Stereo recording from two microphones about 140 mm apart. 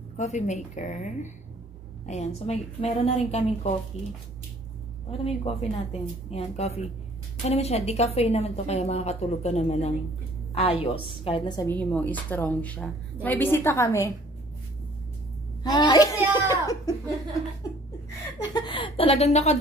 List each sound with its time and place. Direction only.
0.2 s a woman's voice: 55° left (ahead or behind)
5.1 s a woman's voice: 45° left (ahead or behind)
11.7 s a woman's voice: 10° left (ahead or behind)
15.6 s a sound: 25° left (ahead or behind)
16.2 s a sound: 20° right (ahead or behind)
18.5 s a woman's voice: 35° left (ahead or behind); by 19.6 s 50° left (ahead or behind)